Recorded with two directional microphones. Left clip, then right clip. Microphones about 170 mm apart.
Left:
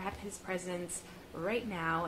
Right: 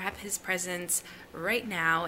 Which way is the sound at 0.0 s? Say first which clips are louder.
Right 6 dB; 10° right (ahead or behind).